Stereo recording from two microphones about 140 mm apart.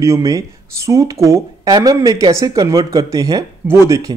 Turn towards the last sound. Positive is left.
turn(degrees=-25)  # may be behind; listen again after turning